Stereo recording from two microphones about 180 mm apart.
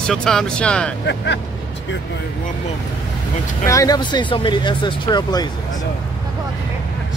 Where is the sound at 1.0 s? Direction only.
75° left (ahead or behind).